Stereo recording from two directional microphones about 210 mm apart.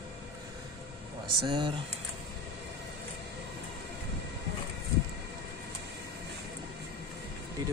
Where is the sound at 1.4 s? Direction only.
20° right (ahead or behind).